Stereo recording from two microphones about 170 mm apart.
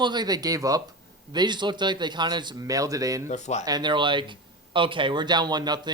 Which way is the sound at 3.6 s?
25° right (ahead or behind).